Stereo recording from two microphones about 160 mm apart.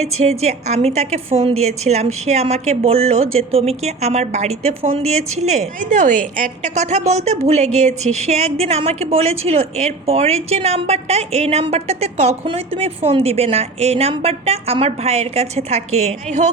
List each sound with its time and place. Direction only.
0.0 s a woman's voice: 40° right (ahead or behind)